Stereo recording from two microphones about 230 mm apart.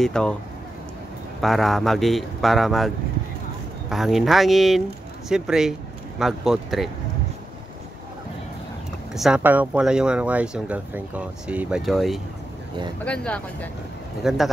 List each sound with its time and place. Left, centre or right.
0.0 s speech: centre
1.4 s speech: centre
3.9 s speech: centre
9.1 s speech: centre